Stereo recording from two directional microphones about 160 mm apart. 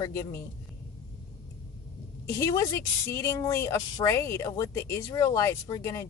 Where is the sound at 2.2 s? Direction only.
20° left (ahead or behind).